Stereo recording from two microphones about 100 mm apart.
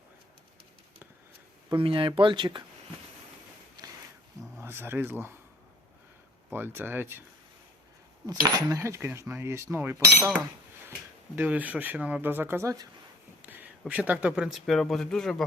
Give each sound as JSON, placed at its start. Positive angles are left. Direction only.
{"t": 1.7, "sound": "speech", "side_deg": -60}
{"t": 4.6, "sound": "speech", "side_deg": -25}
{"t": 6.5, "sound": "speech", "side_deg": -20}
{"t": 8.3, "sound": "speech", "side_deg": -40}
{"t": 8.8, "sound": "speech", "side_deg": -25}
{"t": 11.3, "sound": "speech", "side_deg": -15}
{"t": 13.4, "sound": "speech", "side_deg": -15}